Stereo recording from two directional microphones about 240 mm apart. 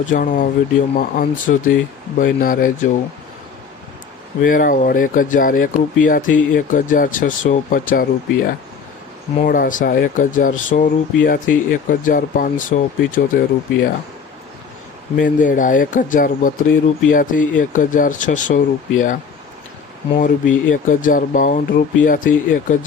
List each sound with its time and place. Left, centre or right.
0.0 s speech: left
4.4 s speech: left
9.4 s speech: left
15.1 s speech: left